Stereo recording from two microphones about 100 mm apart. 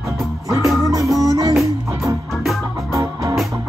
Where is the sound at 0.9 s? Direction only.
35° right (ahead or behind).